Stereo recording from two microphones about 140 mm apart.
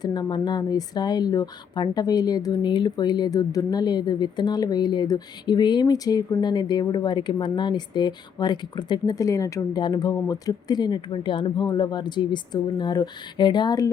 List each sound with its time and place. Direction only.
0.0 s speech: 30° left (ahead or behind)